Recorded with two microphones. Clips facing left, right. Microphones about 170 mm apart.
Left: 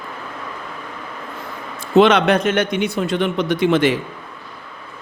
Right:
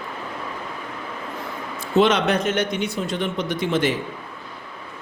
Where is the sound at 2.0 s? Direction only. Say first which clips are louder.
Left 5 dB; 70° left (ahead or behind).